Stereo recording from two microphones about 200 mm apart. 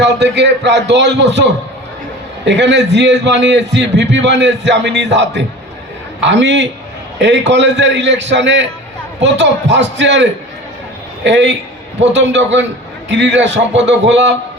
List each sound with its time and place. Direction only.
0.0 s a man's voice: 60° right (ahead or behind)